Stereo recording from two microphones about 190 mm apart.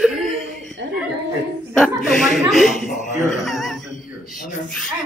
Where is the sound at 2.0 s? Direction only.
Centre (ahead or behind).